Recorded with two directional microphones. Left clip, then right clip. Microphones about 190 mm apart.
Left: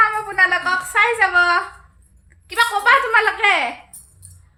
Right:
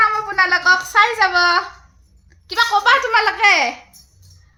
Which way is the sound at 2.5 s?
35° right (ahead or behind).